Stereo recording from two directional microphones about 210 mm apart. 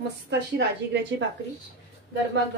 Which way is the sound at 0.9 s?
55° right (ahead or behind).